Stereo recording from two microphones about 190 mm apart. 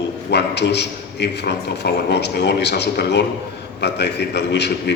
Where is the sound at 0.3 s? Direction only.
65° left (ahead or behind).